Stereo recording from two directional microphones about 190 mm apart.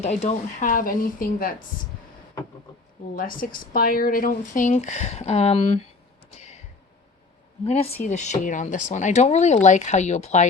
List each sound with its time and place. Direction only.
0.0 s speech: 35° left (ahead or behind)
3.2 s speech: 45° left (ahead or behind)
7.6 s speech: 30° left (ahead or behind)